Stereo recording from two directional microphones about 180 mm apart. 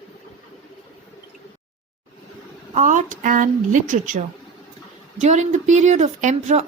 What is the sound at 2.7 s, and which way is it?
A woman's voice, 45° right (ahead or behind).